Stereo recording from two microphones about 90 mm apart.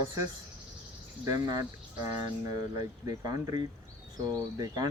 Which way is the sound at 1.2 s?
50° right (ahead or behind).